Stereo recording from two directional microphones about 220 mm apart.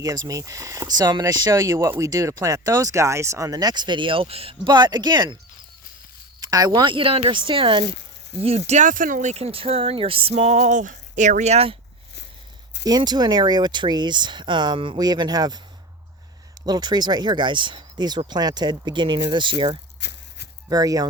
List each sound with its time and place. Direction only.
0.0 s speech: 15° right (ahead or behind)
6.4 s speech: 15° right (ahead or behind)
12.8 s speech: 15° right (ahead or behind)
16.6 s speech: 20° right (ahead or behind)
20.0 s a sound: 50° left (ahead or behind)
20.7 s speech: 15° right (ahead or behind)